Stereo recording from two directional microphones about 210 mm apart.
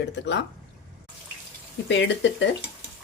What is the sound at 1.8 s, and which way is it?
Speech, 60° left (ahead or behind).